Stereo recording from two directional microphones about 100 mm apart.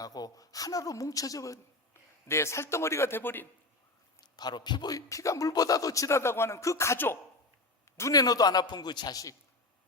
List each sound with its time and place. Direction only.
0.0 s a man's voice: 40° left (ahead or behind); by 3.4 s 20° left (ahead or behind)
4.4 s a man's voice: 45° left (ahead or behind); by 7.2 s 25° left (ahead or behind)
7.9 s a man's voice: 35° left (ahead or behind)